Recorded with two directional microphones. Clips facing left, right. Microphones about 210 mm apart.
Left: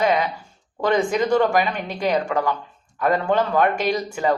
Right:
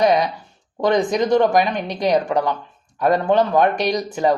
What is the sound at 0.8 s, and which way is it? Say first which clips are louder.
A woman's voice: right 2 dB; 15° right (ahead or behind).